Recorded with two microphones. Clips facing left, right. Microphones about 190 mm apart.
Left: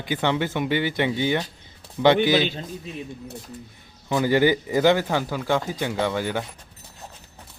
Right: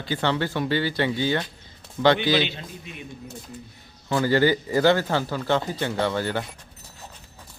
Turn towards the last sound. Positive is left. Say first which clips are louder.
# even
turn(degrees=10)  # may be behind; listen again after turning